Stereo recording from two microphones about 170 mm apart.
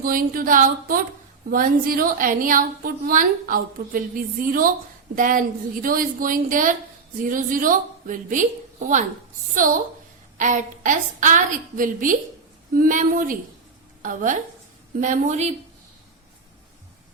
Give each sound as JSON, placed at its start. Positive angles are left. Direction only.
{"t": 0.0, "sound": "a woman's voice", "side_deg": -55}
{"t": 10.3, "sound": "a woman's voice", "side_deg": -50}